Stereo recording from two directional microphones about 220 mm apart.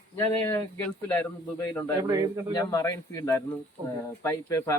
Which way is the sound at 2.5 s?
20° left (ahead or behind).